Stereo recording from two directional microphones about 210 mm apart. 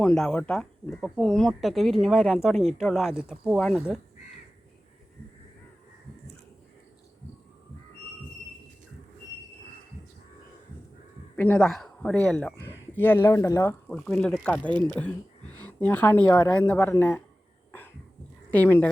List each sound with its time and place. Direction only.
0.0 s speech: 5° left (ahead or behind)
11.3 s speech: 5° left (ahead or behind)
14.7 s speech: 20° right (ahead or behind)
14.9 s speech: 10° left (ahead or behind)
17.7 s cough: 10° left (ahead or behind)
18.5 s speech: 10° left (ahead or behind)